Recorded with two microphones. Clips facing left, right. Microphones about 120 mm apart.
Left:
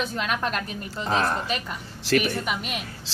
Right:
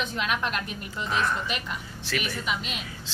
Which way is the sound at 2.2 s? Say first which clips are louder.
Left 4 dB; 50° left (ahead or behind).